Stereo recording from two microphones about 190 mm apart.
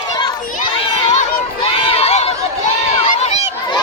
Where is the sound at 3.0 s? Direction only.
35° left (ahead or behind).